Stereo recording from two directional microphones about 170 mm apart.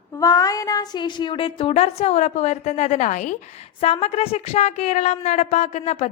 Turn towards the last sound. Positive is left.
turn(degrees=40)  # may be behind; listen again after turning